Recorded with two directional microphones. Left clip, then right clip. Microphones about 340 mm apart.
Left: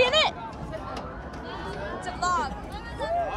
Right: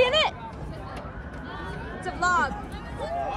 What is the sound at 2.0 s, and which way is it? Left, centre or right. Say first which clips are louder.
Music: right 4 dB; centre.